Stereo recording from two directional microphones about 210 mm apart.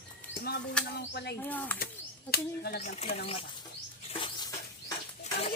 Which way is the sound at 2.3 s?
50° left (ahead or behind).